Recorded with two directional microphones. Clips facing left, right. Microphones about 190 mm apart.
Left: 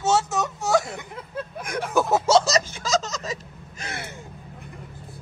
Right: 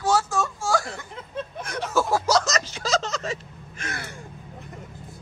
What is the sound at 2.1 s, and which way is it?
Gasp, 25° left (ahead or behind).